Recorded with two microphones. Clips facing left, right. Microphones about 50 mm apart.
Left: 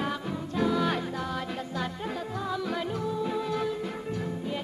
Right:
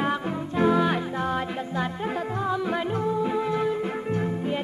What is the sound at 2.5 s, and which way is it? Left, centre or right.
Music, right.